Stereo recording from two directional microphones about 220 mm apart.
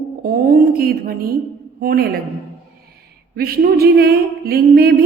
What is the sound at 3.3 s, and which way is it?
A woman's voice, 45° right (ahead or behind).